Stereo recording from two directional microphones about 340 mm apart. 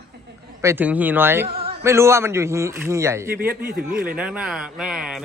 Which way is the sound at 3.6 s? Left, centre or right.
Right.